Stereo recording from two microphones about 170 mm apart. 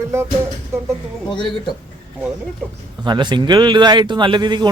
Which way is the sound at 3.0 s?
25° right (ahead or behind).